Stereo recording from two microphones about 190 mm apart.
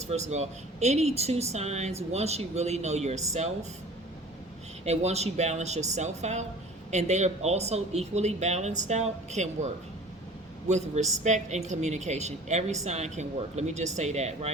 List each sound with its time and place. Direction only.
0.0 s a woman's voice: 35° right (ahead or behind)
4.9 s a woman's voice: 35° right (ahead or behind)
10.7 s a woman's voice: 35° right (ahead or behind)